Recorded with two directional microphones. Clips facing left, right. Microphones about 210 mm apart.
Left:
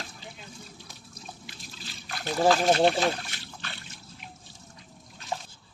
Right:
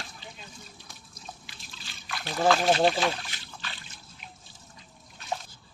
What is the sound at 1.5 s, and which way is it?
Trickle, 40° left (ahead or behind).